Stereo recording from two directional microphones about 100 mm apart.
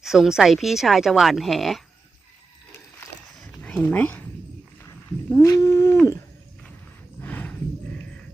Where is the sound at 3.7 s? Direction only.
15° left (ahead or behind).